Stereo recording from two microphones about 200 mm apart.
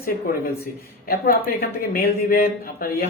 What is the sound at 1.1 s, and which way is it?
Speech, 50° left (ahead or behind).